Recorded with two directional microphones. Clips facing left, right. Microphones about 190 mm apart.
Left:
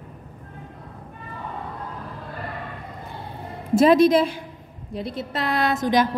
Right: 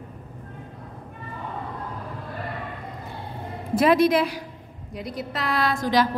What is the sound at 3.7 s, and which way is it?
A woman's voice, 25° left (ahead or behind).